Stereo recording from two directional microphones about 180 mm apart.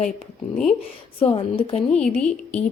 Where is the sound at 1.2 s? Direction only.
30° left (ahead or behind).